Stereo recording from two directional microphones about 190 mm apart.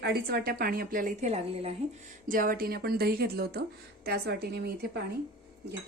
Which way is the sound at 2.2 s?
45° right (ahead or behind).